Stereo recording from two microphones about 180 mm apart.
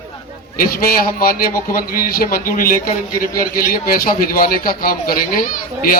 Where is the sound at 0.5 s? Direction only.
55° left (ahead or behind).